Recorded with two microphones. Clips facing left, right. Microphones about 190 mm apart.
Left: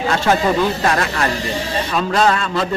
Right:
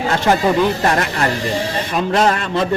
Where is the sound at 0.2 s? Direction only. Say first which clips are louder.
Right 2 dB; 15° right (ahead or behind).